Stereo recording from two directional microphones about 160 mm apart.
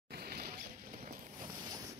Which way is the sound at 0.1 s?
75° right (ahead or behind).